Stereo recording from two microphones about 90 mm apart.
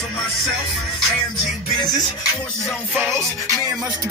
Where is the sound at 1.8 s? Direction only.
50° left (ahead or behind).